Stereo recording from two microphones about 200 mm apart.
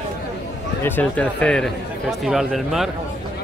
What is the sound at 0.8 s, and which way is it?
A man's voice, 10° left (ahead or behind).